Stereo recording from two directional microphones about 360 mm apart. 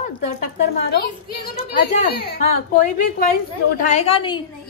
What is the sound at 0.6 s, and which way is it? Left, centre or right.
A woman's voice, left.